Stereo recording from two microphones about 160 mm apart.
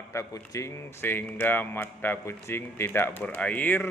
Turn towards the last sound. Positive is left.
turn(degrees=10)  # may be behind; listen again after turning